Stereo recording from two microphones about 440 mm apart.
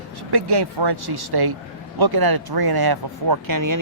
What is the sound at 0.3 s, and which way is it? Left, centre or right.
Speech, right.